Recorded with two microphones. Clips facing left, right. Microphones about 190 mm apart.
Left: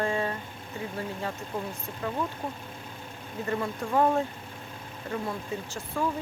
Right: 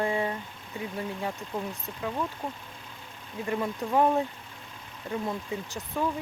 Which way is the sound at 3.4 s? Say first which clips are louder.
Right 1 dB; 15° right (ahead or behind).